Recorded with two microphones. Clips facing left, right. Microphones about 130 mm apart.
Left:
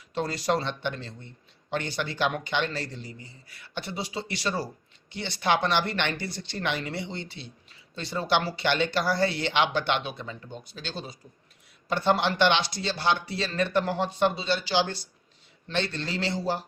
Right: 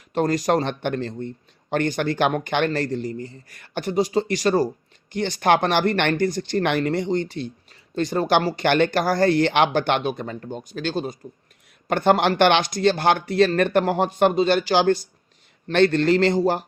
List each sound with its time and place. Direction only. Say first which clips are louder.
0.1 s speech: right 7 dB; 45° right (ahead or behind)